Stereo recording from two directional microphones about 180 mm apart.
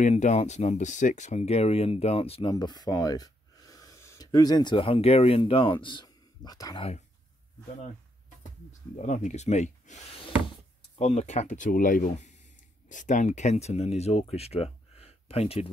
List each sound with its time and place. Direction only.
0.0 s speech: 40° left (ahead or behind)
2.5 s speech: 20° left (ahead or behind)
8.9 s speech: 40° left (ahead or behind)